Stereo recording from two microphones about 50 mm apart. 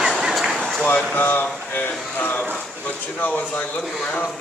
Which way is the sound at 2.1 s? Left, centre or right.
Left.